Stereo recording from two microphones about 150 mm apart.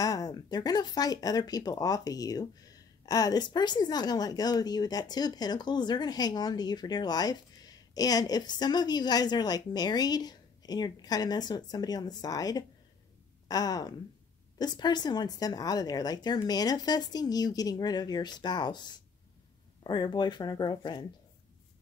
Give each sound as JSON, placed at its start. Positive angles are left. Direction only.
{"t": 0.0, "sound": "speech", "side_deg": 25}